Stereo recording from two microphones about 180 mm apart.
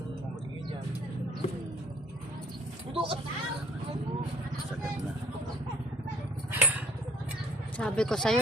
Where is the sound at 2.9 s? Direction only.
30° right (ahead or behind).